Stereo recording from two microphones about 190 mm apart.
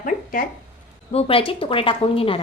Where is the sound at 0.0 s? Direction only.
45° left (ahead or behind).